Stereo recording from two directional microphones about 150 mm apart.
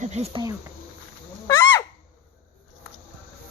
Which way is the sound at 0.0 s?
45° right (ahead or behind).